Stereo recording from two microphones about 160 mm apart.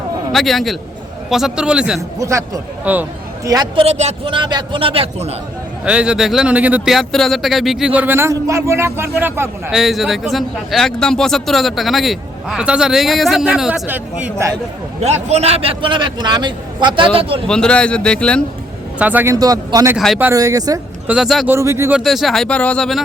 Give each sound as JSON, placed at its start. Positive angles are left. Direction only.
{"t": 0.3, "sound": "speech", "side_deg": 0}
{"t": 2.0, "sound": "a man's voice", "side_deg": -20}
{"t": 3.4, "sound": "a man's voice", "side_deg": -25}
{"t": 3.8, "sound": "a man's voice", "side_deg": -40}
{"t": 5.8, "sound": "speech", "side_deg": -5}
{"t": 9.7, "sound": "speech", "side_deg": 0}
{"t": 15.0, "sound": "a man's voice", "side_deg": -40}
{"t": 17.5, "sound": "speech", "side_deg": 5}
{"t": 18.9, "sound": "a man's voice", "side_deg": -10}
{"t": 21.1, "sound": "speech", "side_deg": 0}
{"t": 21.4, "sound": "speech", "side_deg": -15}
{"t": 21.9, "sound": "speech", "side_deg": 0}